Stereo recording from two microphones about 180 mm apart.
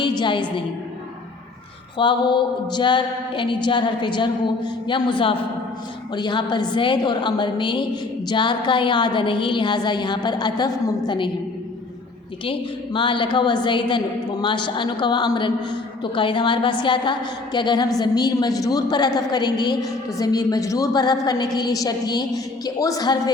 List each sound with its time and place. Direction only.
0.2 s a woman's voice: 25° left (ahead or behind)
2.0 s a woman's voice: 25° left (ahead or behind)
12.5 s a woman's voice: 30° left (ahead or behind)